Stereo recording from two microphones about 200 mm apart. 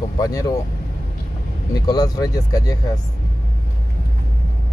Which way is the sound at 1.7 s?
20° left (ahead or behind).